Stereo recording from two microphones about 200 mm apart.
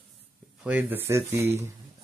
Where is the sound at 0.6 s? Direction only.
10° right (ahead or behind).